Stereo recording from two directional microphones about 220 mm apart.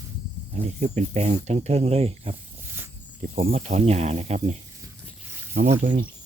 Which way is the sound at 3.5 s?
30° right (ahead or behind).